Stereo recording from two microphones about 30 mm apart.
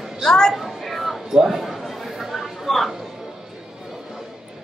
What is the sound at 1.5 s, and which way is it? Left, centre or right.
Speech, centre.